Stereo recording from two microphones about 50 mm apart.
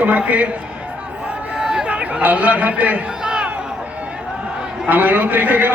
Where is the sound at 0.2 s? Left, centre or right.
Right.